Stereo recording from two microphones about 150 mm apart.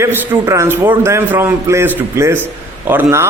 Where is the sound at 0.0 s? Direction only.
15° right (ahead or behind).